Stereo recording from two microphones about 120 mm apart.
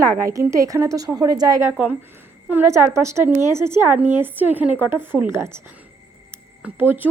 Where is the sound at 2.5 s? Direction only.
20° right (ahead or behind).